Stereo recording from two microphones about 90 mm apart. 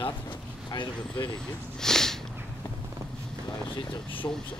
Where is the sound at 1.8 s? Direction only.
5° left (ahead or behind).